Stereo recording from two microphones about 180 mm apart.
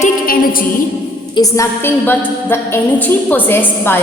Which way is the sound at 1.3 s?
20° left (ahead or behind).